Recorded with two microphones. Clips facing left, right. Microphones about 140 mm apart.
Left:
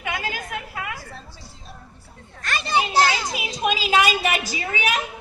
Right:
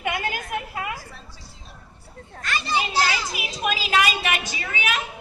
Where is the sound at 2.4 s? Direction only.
50° left (ahead or behind).